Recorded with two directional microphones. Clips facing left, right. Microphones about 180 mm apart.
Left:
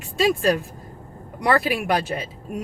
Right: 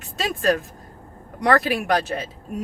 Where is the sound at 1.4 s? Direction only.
10° left (ahead or behind).